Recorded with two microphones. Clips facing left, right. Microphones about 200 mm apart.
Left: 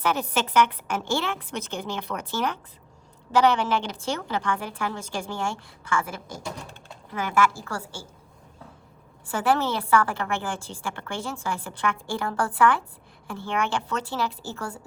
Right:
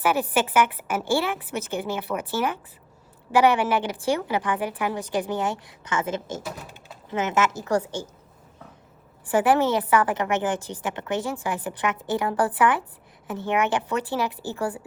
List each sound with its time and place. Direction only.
0.0 s a woman's voice: 10° right (ahead or behind); by 6.4 s 25° right (ahead or behind)
6.4 s speech: 5° right (ahead or behind)
7.1 s a woman's voice: 25° right (ahead or behind)
9.3 s a woman's voice: 15° right (ahead or behind)